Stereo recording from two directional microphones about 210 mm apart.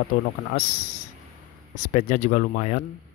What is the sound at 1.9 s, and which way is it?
Speech, 35° left (ahead or behind).